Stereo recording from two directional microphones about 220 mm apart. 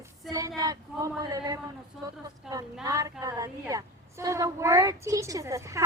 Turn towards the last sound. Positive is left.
turn(degrees=-15)  # may be behind; listen again after turning